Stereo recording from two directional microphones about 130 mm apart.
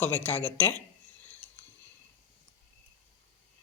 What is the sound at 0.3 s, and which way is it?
Speech, 15° left (ahead or behind).